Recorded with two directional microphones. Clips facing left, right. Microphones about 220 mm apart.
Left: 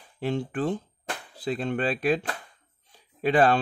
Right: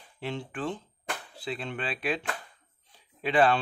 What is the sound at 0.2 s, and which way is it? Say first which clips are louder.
Speech: left 6 dB; 45° left (ahead or behind).